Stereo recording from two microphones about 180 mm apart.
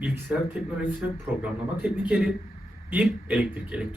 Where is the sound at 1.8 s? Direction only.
5° right (ahead or behind).